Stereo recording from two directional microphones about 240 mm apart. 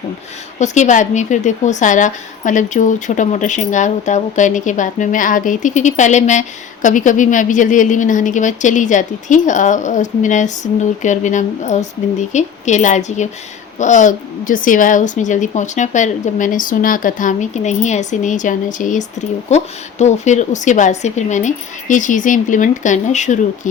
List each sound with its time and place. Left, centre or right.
0.6 s a woman's voice: left